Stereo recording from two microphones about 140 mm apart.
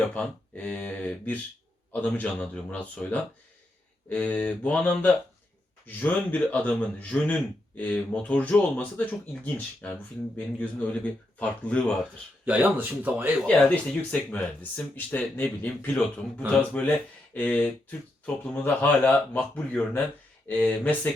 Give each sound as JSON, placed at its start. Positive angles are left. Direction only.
{"t": 0.1, "sound": "speech", "side_deg": 10}
{"t": 12.5, "sound": "speech", "side_deg": -10}
{"t": 13.4, "sound": "speech", "side_deg": 10}